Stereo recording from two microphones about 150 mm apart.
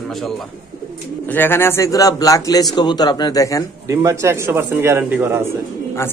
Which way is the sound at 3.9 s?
20° right (ahead or behind).